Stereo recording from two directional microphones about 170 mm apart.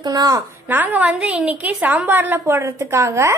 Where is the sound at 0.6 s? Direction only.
10° right (ahead or behind).